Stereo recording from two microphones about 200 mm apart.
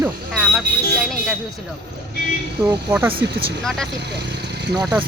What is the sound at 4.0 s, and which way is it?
Vehicle, 55° right (ahead or behind).